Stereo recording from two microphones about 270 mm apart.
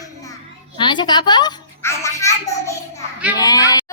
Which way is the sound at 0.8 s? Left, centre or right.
Centre.